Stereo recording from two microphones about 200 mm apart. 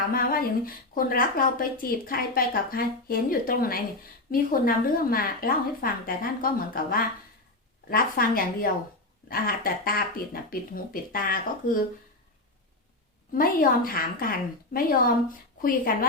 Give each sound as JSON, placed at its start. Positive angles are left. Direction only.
{"t": 0.1, "sound": "speech", "side_deg": 45}
{"t": 13.3, "sound": "speech", "side_deg": 45}